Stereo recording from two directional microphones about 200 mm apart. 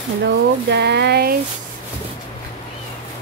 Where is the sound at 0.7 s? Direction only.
55° right (ahead or behind).